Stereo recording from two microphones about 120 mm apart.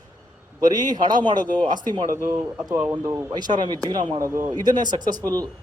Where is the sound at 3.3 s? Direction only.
35° right (ahead or behind).